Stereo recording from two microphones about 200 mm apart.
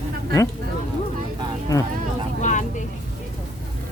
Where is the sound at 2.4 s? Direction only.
40° left (ahead or behind).